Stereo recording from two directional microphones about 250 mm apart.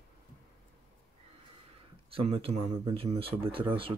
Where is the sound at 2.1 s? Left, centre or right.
Right.